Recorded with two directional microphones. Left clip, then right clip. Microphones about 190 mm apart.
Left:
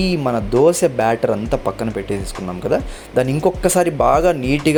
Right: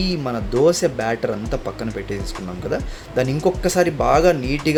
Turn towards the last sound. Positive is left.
turn(degrees=15)  # may be behind; listen again after turning